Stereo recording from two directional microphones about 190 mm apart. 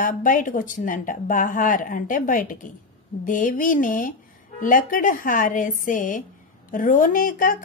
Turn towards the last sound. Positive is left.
turn(degrees=45)  # may be behind; listen again after turning